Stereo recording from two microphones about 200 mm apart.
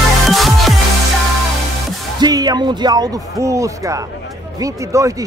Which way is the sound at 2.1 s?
20° right (ahead or behind).